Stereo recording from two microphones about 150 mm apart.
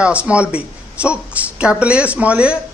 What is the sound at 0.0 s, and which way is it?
Speech, 10° right (ahead or behind).